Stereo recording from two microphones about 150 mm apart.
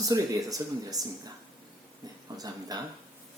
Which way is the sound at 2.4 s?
25° right (ahead or behind).